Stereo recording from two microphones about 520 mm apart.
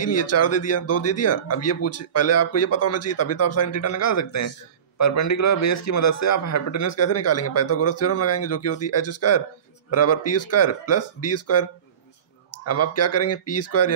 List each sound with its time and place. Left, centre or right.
0.0 s speech: left